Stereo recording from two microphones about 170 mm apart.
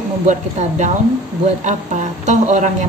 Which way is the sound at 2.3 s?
45° right (ahead or behind).